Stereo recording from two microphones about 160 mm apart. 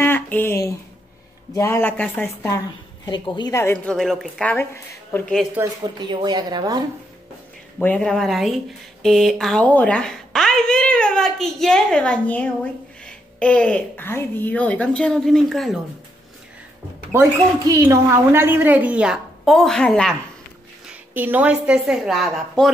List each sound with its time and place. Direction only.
0.0 s a sound: 15° left (ahead or behind)
1.5 s speech: 15° left (ahead or behind)
3.1 s a woman's voice: 25° left (ahead or behind)
3.7 s a woman's voice: 5° left (ahead or behind)
5.6 s a woman's voice: 15° right (ahead or behind)
5.9 s speech: 25° right (ahead or behind)
7.8 s a woman's voice: 5° left (ahead or behind)
17.1 s a woman's voice: 20° right (ahead or behind); by 20.2 s 5° left (ahead or behind)
20.9 s a woman's voice: 10° right (ahead or behind)